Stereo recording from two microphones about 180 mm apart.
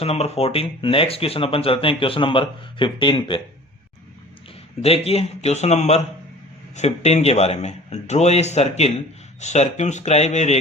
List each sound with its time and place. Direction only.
0.0 s speech: 35° left (ahead or behind)
4.8 s speech: 35° left (ahead or behind)